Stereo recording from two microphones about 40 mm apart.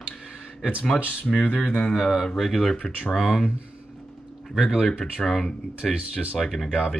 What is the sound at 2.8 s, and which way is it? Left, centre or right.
Speech, left.